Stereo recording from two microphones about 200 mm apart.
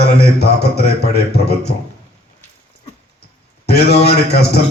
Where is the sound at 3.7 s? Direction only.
55° left (ahead or behind).